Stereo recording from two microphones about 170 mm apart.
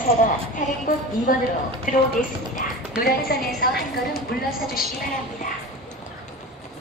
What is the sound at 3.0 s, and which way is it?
Speech, 65° left (ahead or behind).